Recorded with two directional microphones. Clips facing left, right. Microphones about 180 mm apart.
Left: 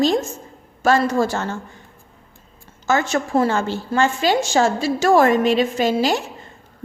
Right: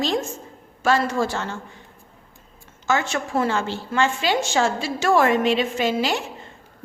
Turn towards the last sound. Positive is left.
turn(degrees=40)  # may be behind; listen again after turning